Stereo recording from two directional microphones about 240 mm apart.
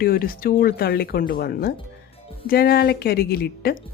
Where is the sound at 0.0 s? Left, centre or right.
Left.